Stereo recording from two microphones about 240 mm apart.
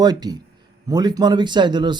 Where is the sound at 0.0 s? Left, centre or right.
Centre.